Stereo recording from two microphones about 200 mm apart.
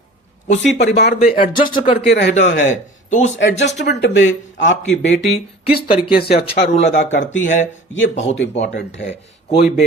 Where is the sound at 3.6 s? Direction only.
60° left (ahead or behind).